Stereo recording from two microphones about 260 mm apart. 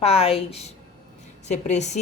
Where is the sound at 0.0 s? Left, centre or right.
Left.